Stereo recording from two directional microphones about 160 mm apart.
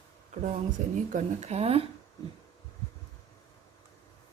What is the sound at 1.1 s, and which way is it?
Speech, 50° right (ahead or behind).